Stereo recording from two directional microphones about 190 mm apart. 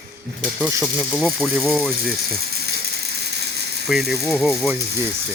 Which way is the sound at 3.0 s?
60° right (ahead or behind).